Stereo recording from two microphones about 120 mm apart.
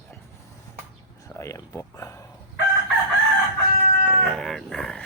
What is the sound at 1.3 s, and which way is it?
Speech, 25° left (ahead or behind).